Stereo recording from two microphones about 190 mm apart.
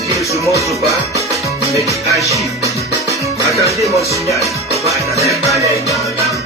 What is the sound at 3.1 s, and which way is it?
Music, 15° right (ahead or behind).